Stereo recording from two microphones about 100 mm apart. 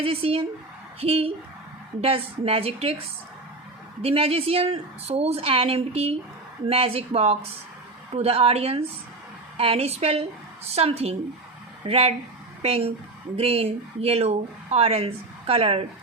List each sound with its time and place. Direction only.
0.0 s speech: 70° right (ahead or behind)
4.0 s speech: 75° right (ahead or behind)
6.7 s speech: 75° right (ahead or behind)